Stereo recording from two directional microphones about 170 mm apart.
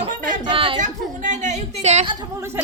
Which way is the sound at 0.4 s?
30° right (ahead or behind).